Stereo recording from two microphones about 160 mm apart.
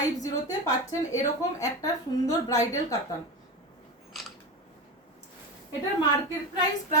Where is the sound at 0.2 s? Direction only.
20° left (ahead or behind).